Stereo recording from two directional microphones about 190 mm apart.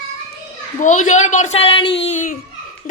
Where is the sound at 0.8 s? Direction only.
40° left (ahead or behind).